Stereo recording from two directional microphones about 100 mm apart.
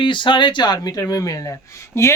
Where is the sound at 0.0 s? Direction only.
55° left (ahead or behind).